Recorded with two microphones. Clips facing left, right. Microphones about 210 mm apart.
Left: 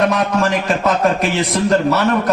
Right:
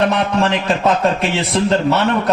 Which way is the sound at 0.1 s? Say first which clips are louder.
Even; 30° right (ahead or behind).